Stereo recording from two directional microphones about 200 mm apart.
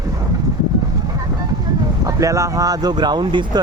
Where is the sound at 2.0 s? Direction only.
15° right (ahead or behind).